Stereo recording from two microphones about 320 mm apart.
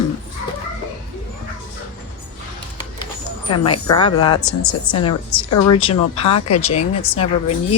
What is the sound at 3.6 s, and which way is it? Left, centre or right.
Speech, centre.